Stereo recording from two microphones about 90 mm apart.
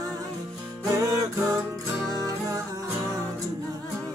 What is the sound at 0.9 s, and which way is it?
Music, 40° right (ahead or behind).